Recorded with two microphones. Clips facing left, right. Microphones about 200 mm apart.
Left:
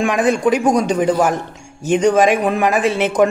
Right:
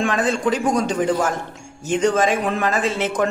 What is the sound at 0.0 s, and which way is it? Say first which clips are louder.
Speech: left 5 dB; 15° left (ahead or behind).